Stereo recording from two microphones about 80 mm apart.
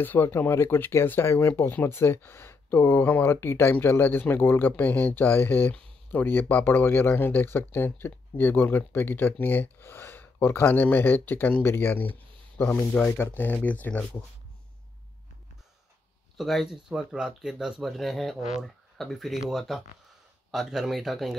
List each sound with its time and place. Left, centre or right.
0.0 s speech: left
16.3 s speech: centre